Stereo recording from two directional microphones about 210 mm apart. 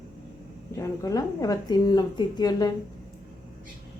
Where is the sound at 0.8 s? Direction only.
15° left (ahead or behind).